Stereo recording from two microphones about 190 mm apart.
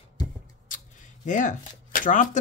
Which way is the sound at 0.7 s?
45° left (ahead or behind).